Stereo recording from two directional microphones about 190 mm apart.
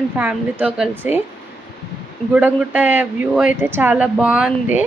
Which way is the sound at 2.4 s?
5° right (ahead or behind).